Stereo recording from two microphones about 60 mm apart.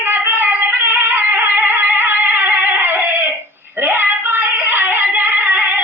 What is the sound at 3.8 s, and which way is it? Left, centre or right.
Singing, right.